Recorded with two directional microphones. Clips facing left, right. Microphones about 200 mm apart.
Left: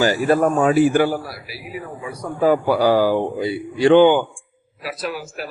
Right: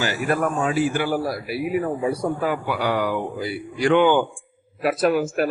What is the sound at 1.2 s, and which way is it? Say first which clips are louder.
Speech: right 10 dB; 50° right (ahead or behind).